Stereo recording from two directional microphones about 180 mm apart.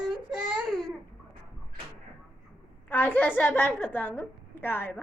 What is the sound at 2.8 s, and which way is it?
A woman's voice, 10° left (ahead or behind).